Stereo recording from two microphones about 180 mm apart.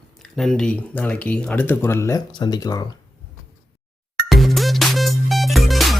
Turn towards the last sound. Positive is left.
turn(degrees=0)  # may be behind; listen again after turning